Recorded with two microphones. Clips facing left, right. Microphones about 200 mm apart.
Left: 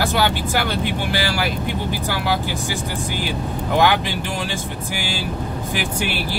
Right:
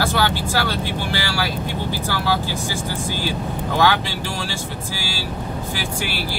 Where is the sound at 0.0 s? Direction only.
15° left (ahead or behind).